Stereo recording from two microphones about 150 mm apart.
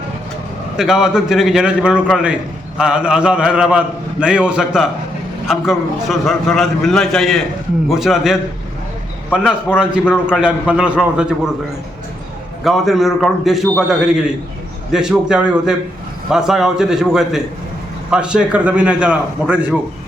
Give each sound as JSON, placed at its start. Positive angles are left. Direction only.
{"t": 0.8, "sound": "a man's voice", "side_deg": -5}
{"t": 12.6, "sound": "a man's voice", "side_deg": 0}